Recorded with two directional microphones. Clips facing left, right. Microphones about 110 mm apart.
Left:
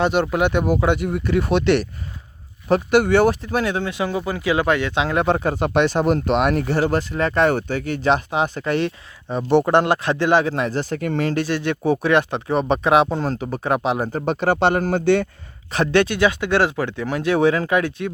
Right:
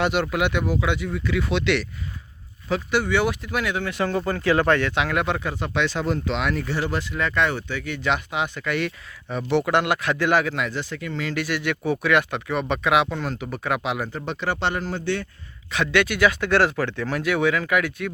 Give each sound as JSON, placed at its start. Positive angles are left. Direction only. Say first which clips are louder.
{"t": 0.0, "sound": "speech", "louder": "left 4 dB", "side_deg": 30}
{"t": 0.6, "sound": "speech", "louder": "left 5 dB", "side_deg": 45}
{"t": 3.9, "sound": "speech", "louder": "left 1 dB", "side_deg": 10}
{"t": 11.3, "sound": "speech", "louder": "left 4 dB", "side_deg": 30}
{"t": 15.7, "sound": "speech", "louder": "left 4 dB", "side_deg": 35}
{"t": 17.3, "sound": "speech", "louder": "left 5 dB", "side_deg": 30}